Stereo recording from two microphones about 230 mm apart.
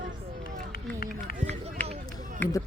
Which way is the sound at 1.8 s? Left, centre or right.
Centre.